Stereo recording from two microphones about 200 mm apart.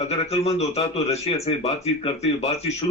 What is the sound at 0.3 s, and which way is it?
Speech, 30° left (ahead or behind).